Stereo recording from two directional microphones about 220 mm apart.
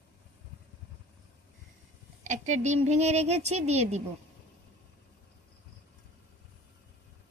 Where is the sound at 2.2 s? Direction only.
35° right (ahead or behind).